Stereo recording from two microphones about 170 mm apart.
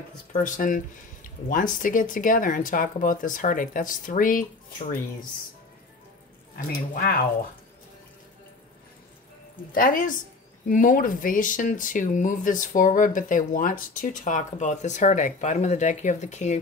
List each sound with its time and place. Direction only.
0.3 s speech: 50° left (ahead or behind)
6.5 s speech: 60° left (ahead or behind)
9.7 s speech: 55° left (ahead or behind)